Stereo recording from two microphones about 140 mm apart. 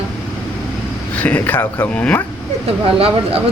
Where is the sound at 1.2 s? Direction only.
10° left (ahead or behind).